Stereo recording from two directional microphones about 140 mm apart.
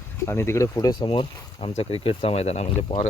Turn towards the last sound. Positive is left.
turn(degrees=35)  # may be behind; listen again after turning